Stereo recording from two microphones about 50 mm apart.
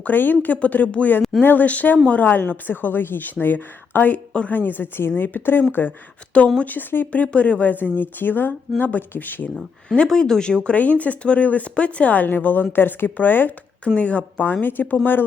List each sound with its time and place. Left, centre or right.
0.0 s speech: left
6.3 s speech: left
6.7 s speech: left
10.1 s speech: centre
10.7 s speech: left
13.8 s speech: left